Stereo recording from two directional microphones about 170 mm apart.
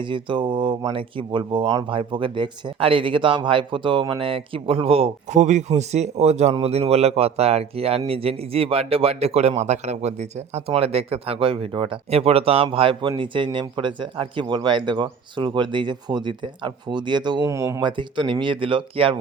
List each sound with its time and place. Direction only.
0.0 s speech: 30° right (ahead or behind)